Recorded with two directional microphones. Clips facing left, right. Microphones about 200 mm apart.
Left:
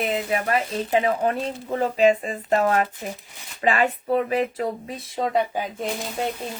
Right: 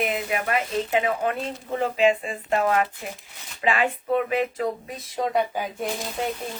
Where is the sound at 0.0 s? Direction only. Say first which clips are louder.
Left 2 dB; 30° left (ahead or behind).